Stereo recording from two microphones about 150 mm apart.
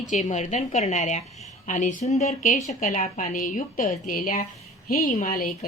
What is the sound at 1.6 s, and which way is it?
Speech, 55° left (ahead or behind).